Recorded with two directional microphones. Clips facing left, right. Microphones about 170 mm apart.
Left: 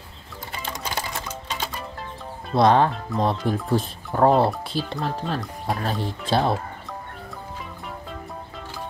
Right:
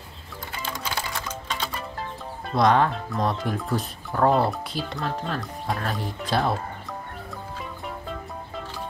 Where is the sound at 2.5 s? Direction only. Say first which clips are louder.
Left 2 dB; 30° left (ahead or behind).